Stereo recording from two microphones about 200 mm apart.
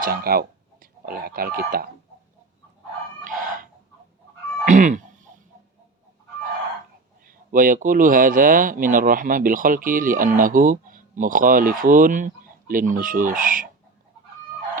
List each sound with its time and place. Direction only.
0.0 s speech: 50° right (ahead or behind)
3.2 s chicken: 40° right (ahead or behind)
4.6 s goose: 40° right (ahead or behind)
7.3 s speech: 45° right (ahead or behind)